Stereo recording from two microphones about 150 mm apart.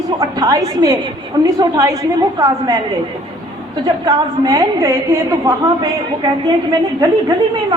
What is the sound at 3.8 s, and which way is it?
A man's voice, 25° right (ahead or behind).